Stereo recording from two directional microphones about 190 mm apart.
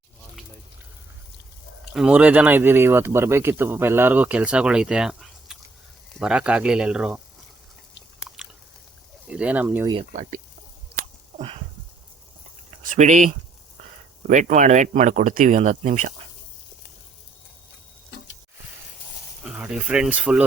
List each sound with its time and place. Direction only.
1.9 s speech: 5° right (ahead or behind)
9.2 s speech: 5° right (ahead or behind)
9.8 s speech: 25° right (ahead or behind)
10.1 s speech: 40° right (ahead or behind)
11.3 s a sound: 30° right (ahead or behind)
12.8 s speech: 40° right (ahead or behind)
19.5 s speech: 5° right (ahead or behind)